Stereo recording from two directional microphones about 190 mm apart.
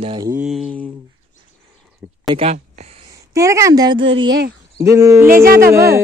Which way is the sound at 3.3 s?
15° right (ahead or behind).